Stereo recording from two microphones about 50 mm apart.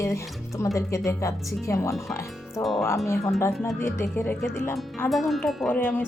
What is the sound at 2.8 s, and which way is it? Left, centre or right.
Speech, left.